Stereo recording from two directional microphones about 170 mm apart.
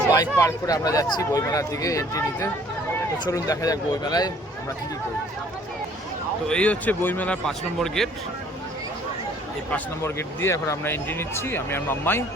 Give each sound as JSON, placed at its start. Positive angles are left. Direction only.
{"t": 0.1, "sound": "speech", "side_deg": 20}
{"t": 6.5, "sound": "speech", "side_deg": 5}
{"t": 9.7, "sound": "speech", "side_deg": 15}